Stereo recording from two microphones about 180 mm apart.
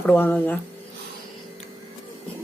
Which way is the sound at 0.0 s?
10° left (ahead or behind).